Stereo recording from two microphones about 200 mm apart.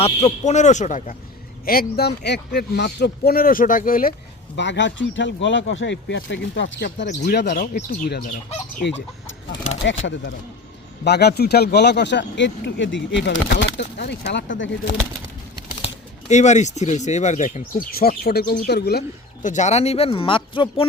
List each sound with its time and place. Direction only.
0.0 s speech: 30° left (ahead or behind)
4.5 s speech: 60° left (ahead or behind)
8.8 s speech: 65° left (ahead or behind)
11.0 s speech: 55° left (ahead or behind)
16.3 s speech: 35° left (ahead or behind)